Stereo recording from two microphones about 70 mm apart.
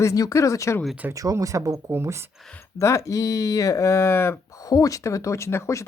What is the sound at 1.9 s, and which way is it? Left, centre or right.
Speech, right.